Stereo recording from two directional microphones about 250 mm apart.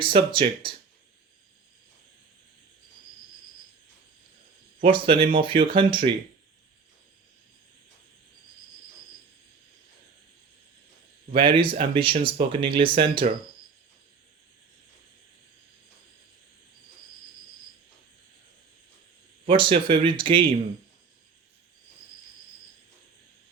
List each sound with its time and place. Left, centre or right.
0.0 s speech: centre
4.8 s speech: right
11.3 s speech: right
19.5 s speech: right